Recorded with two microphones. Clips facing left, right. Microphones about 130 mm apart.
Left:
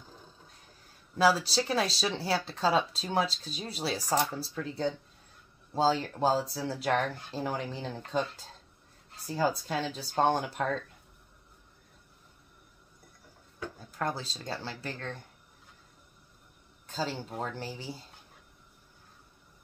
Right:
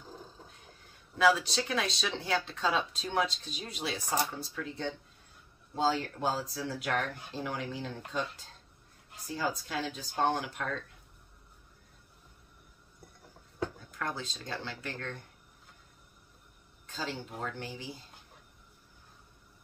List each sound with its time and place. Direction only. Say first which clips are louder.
1.1 s speech: left 1 dB; 35° left (ahead or behind)
9.3 s speech: left 5 dB; 35° left (ahead or behind)
13.9 s speech: left 6 dB; 35° left (ahead or behind)
16.8 s speech: left 4 dB; 35° left (ahead or behind)